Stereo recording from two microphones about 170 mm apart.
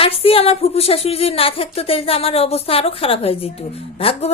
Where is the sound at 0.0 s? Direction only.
35° left (ahead or behind).